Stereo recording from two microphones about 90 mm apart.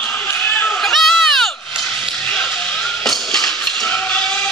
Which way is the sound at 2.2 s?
15° left (ahead or behind).